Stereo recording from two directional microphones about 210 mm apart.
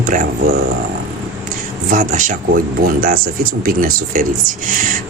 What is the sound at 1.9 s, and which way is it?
Speech, 40° right (ahead or behind).